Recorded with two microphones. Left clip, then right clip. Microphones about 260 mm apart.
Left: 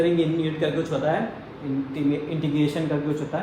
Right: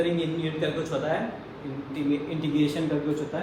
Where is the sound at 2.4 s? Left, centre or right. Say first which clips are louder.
Left 2 dB; left.